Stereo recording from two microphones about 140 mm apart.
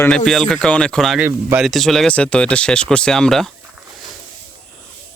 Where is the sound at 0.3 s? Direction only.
Centre (ahead or behind).